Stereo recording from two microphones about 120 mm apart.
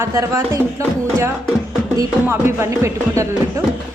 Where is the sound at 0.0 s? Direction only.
25° right (ahead or behind).